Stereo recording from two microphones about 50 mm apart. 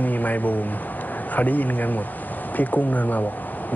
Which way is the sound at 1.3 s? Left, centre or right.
Left.